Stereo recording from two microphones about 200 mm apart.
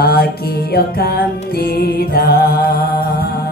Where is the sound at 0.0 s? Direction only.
50° left (ahead or behind).